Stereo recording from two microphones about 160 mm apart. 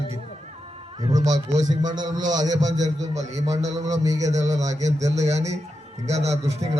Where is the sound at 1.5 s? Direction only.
45° right (ahead or behind).